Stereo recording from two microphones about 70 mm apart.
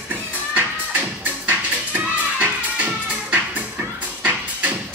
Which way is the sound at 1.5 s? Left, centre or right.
Right.